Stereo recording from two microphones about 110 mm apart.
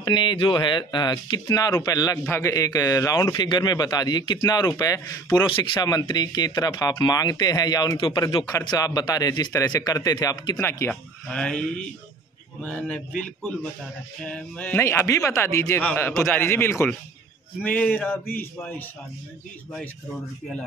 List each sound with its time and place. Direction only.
0.0 s speech: 40° left (ahead or behind)
5.5 s speech: 45° left (ahead or behind)
10.6 s a man's voice: 25° left (ahead or behind)
10.9 s a man's voice: 10° left (ahead or behind)